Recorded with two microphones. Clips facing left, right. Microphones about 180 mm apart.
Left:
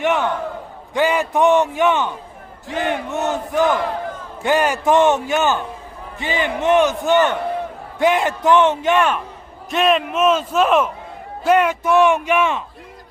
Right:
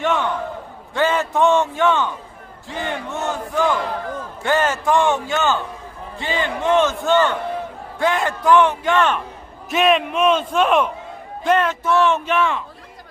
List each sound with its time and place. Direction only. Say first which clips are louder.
0.0 s a man's voice: left 2 dB; 20° left (ahead or behind)
9.6 s a man's voice: even; centre (ahead or behind); by 12.6 s 20° left (ahead or behind)